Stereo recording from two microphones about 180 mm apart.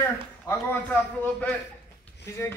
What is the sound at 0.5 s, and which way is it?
A man's voice, 20° left (ahead or behind).